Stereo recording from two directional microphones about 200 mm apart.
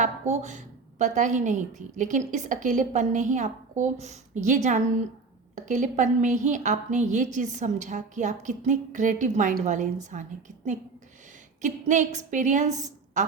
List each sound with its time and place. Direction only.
0.0 s a woman's voice: 35° right (ahead or behind)
11.6 s a woman's voice: 40° right (ahead or behind)